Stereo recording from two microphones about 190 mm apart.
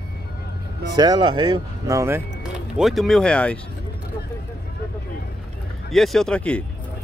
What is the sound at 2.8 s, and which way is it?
Speech, centre (ahead or behind).